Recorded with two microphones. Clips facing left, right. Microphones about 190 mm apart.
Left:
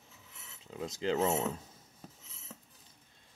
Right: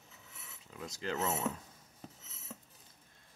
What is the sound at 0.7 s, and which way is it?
Speech, 25° left (ahead or behind).